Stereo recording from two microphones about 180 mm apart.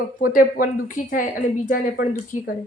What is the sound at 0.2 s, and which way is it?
A woman's voice, 50° left (ahead or behind).